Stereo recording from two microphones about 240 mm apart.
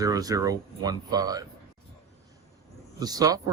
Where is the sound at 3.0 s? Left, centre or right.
Centre.